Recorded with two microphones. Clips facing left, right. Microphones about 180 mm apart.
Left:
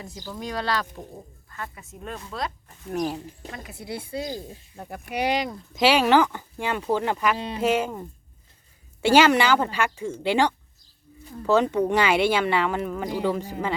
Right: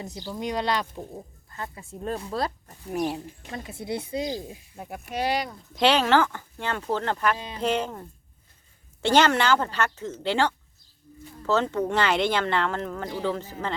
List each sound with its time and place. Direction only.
0.0 s speech: 20° right (ahead or behind)
2.9 s speech: 5° right (ahead or behind)
3.5 s speech: 25° right (ahead or behind)
5.1 s speech: 15° left (ahead or behind)